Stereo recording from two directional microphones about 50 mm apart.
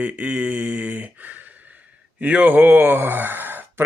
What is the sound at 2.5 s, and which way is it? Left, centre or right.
Speech, right.